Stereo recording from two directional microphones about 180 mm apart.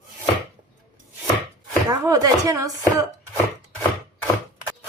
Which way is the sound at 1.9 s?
20° right (ahead or behind).